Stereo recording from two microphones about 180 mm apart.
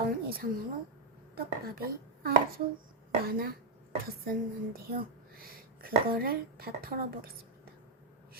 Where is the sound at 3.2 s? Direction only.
55° right (ahead or behind).